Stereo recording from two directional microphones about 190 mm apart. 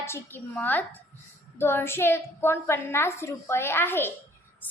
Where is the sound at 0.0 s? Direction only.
10° left (ahead or behind).